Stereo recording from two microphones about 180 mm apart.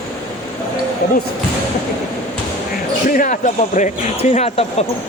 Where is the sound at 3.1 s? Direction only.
45° left (ahead or behind).